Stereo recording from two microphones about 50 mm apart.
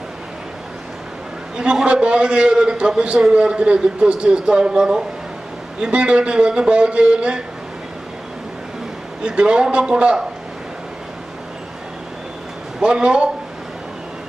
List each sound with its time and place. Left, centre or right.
1.5 s a man's voice: centre
9.2 s a man's voice: centre
12.8 s a man's voice: centre